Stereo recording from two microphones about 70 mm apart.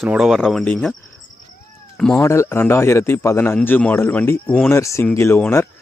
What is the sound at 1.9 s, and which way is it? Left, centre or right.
Speech, centre.